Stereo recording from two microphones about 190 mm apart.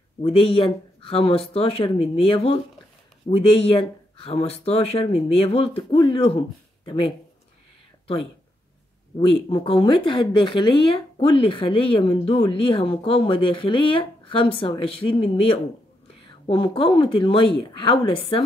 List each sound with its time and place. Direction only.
0.2 s speech: 30° left (ahead or behind)
9.2 s speech: 25° left (ahead or behind)